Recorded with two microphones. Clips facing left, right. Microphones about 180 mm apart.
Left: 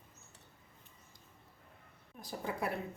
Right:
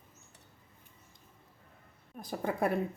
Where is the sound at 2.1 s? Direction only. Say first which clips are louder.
Right 6 dB; 50° right (ahead or behind).